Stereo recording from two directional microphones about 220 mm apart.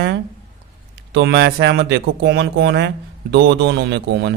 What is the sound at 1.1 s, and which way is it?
Speech, 50° right (ahead or behind).